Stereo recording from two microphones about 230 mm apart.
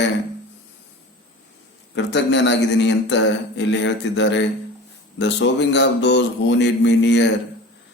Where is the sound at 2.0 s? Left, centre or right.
Left.